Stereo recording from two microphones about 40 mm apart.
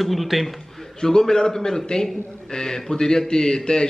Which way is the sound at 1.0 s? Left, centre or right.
Centre.